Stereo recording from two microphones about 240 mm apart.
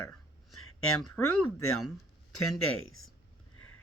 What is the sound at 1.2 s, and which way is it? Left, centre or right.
Speech, left.